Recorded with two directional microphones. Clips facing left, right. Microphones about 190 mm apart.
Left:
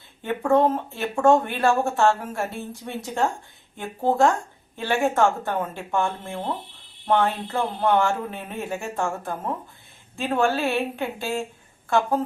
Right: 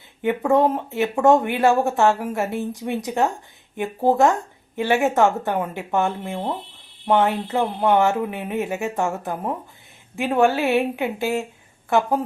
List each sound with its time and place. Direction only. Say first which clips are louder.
0.2 s speech: right 2 dB; 15° right (ahead or behind)